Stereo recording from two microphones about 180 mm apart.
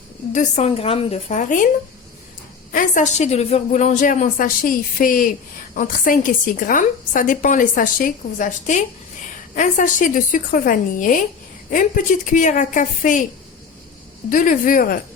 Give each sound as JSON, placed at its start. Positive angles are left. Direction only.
{"t": 0.3, "sound": "a woman's voice", "side_deg": 40}
{"t": 2.7, "sound": "a woman's voice", "side_deg": 45}
{"t": 14.3, "sound": "a woman's voice", "side_deg": 45}